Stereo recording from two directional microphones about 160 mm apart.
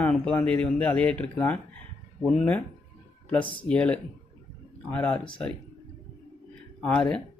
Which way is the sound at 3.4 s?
30° left (ahead or behind).